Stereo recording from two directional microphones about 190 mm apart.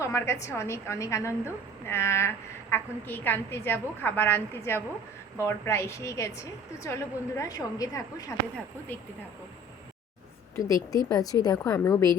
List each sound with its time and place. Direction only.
0.0 s a woman's voice: 15° left (ahead or behind)
10.5 s a woman's voice: 15° left (ahead or behind)